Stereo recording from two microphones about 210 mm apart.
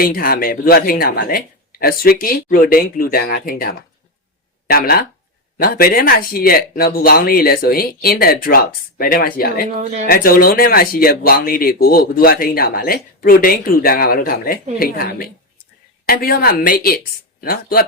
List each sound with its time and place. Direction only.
0.0 s speech: 45° left (ahead or behind)
9.7 s speech: 35° right (ahead or behind)
10.1 s speech: 45° left (ahead or behind)